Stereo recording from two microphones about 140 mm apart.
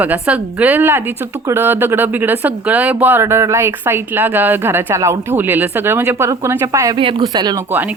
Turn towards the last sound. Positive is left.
turn(degrees=-30)  # may be behind; listen again after turning